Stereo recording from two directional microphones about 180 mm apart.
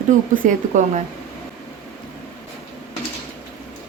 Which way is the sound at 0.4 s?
45° right (ahead or behind).